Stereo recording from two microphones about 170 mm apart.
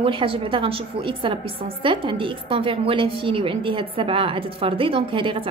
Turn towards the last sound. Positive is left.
turn(degrees=-30)  # may be behind; listen again after turning